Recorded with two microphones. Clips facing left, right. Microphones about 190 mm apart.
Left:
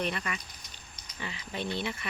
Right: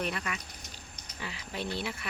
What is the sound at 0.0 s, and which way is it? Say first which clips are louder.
Speech: left 1 dB; centre (ahead or behind).